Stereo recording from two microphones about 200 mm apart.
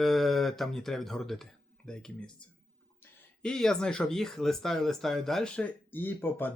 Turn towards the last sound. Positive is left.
turn(degrees=10)  # may be behind; listen again after turning